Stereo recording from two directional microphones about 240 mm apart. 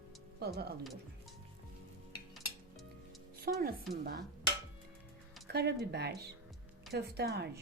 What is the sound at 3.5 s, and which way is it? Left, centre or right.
Speech, right.